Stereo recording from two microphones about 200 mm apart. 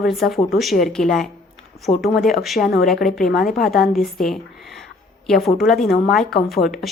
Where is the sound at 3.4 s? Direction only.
45° left (ahead or behind).